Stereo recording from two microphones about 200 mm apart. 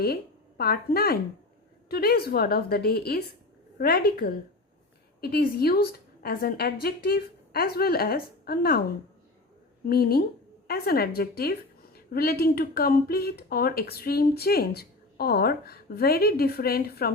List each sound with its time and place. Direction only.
0.0 s a woman's voice: 50° left (ahead or behind)
9.9 s a woman's voice: 50° left (ahead or behind)